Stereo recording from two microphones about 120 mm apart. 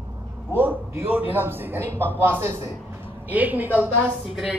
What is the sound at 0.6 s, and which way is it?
A man's voice, 15° right (ahead or behind).